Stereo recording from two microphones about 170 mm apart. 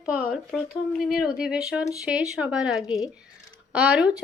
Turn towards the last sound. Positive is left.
turn(degrees=-5)  # may be behind; listen again after turning